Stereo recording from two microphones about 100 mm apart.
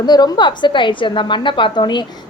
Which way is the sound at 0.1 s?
45° left (ahead or behind).